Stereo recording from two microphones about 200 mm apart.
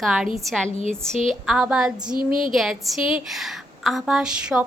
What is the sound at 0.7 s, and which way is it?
Speech, 30° left (ahead or behind).